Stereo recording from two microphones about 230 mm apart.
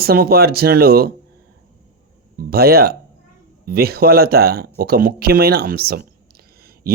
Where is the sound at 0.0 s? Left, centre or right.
Right.